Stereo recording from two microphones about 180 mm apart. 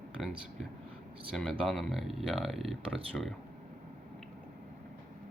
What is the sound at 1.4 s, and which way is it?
Speech, 5° left (ahead or behind).